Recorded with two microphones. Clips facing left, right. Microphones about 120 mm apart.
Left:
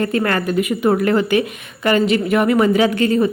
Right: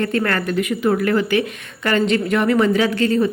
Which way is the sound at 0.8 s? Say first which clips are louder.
Left 2 dB; 25° left (ahead or behind).